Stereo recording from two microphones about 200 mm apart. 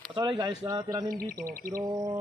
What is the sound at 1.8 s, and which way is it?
Speech, 15° right (ahead or behind).